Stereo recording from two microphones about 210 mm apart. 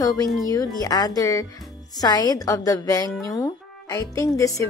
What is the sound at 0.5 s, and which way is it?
Speech, 15° left (ahead or behind).